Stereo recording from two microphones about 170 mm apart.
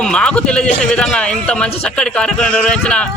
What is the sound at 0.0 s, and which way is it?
A man's voice, 5° left (ahead or behind).